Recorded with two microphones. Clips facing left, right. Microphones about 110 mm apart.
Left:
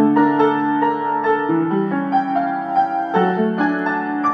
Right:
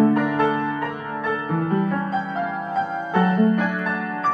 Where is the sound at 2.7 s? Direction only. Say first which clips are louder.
Left 6 dB; 25° left (ahead or behind).